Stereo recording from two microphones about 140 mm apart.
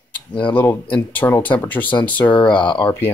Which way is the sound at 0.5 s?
10° left (ahead or behind).